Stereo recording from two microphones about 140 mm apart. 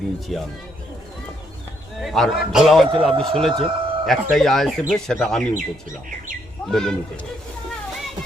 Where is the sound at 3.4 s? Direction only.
Centre (ahead or behind).